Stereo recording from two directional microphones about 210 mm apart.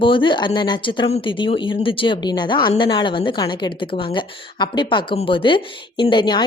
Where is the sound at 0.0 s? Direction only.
25° left (ahead or behind).